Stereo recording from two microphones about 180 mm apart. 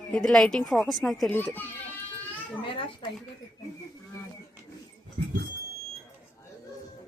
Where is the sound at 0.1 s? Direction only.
5° left (ahead or behind).